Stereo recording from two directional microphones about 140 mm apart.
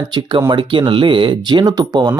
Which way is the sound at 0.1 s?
35° right (ahead or behind).